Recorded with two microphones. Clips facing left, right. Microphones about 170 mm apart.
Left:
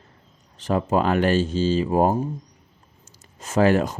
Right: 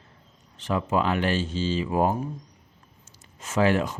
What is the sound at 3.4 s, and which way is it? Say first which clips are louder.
Speech: left 4 dB; 40° left (ahead or behind).